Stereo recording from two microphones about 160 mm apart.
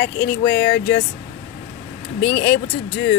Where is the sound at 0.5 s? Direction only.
90° left.